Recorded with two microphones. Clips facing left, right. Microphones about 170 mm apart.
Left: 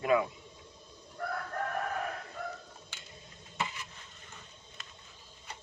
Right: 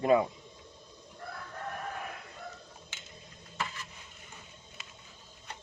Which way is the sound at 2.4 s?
70° left (ahead or behind).